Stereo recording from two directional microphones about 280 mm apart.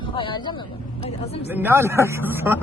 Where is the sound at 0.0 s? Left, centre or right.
Centre.